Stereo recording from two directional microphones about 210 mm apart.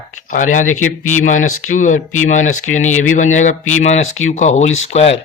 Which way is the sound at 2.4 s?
80° left.